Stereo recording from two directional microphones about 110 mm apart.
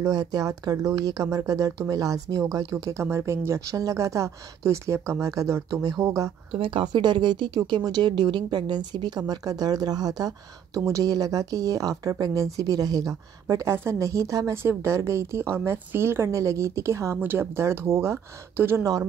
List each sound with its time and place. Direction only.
0.0 s speech: 30° right (ahead or behind)
6.6 s speech: 50° right (ahead or behind); by 18.9 s 25° right (ahead or behind)